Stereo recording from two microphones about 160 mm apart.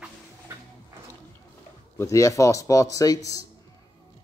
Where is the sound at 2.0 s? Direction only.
20° left (ahead or behind).